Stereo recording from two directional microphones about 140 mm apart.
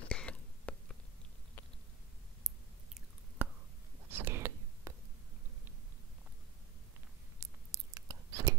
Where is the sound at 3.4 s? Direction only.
15° right (ahead or behind).